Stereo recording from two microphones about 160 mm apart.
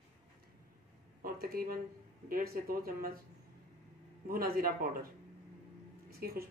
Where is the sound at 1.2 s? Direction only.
70° right (ahead or behind).